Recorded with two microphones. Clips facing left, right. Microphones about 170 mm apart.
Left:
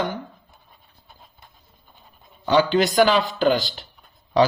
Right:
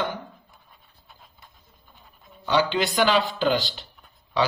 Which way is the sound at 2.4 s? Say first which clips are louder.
Left 5 dB; 45° left (ahead or behind).